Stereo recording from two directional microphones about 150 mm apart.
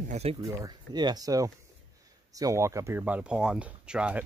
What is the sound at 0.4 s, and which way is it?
Speech, 25° right (ahead or behind).